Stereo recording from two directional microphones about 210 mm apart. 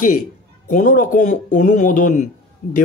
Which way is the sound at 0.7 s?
40° left (ahead or behind).